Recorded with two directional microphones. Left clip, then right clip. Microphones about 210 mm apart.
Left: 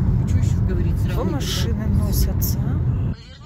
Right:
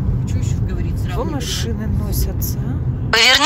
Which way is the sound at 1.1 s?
5° right (ahead or behind).